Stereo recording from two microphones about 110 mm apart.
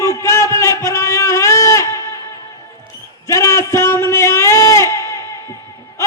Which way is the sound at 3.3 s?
25° left (ahead or behind).